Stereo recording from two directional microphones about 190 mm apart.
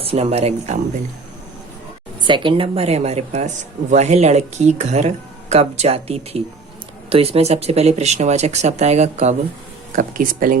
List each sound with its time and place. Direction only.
0.0 s speech: 30° right (ahead or behind)
2.2 s speech: 25° right (ahead or behind); by 10.6 s 45° right (ahead or behind)